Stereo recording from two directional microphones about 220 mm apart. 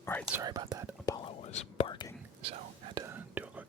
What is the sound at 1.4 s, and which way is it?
Whispering, 30° left (ahead or behind).